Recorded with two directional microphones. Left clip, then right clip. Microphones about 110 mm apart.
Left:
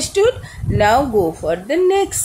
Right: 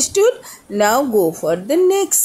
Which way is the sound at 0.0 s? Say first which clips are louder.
Right 1 dB; 30° right (ahead or behind).